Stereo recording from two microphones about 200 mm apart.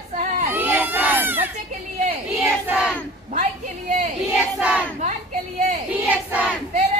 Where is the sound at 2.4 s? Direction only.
5° right (ahead or behind).